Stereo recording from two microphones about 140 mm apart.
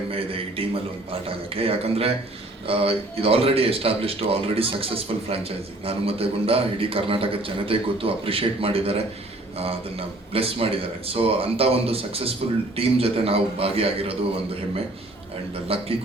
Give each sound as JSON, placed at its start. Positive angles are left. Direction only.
{"t": 0.1, "sound": "a man's voice", "side_deg": -40}
{"t": 10.3, "sound": "a man's voice", "side_deg": -40}
{"t": 15.6, "sound": "a man's voice", "side_deg": -45}